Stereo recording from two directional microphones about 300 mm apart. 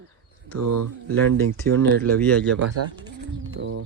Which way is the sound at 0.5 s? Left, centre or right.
Right.